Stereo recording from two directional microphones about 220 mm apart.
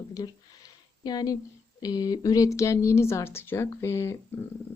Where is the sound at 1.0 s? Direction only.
20° left (ahead or behind).